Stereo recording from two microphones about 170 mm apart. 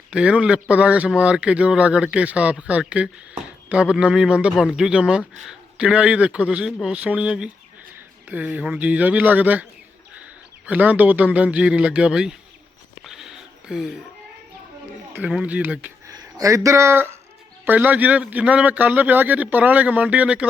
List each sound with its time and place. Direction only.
0.1 s a man's voice: 5° right (ahead or behind)
10.7 s a man's voice: 10° right (ahead or behind)
13.1 s a sound: centre (ahead or behind)
15.1 s a man's voice: 5° right (ahead or behind)
16.0 s a man's voice: 20° right (ahead or behind)